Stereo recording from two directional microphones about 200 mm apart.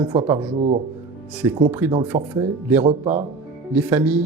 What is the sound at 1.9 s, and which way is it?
Speech, 25° right (ahead or behind).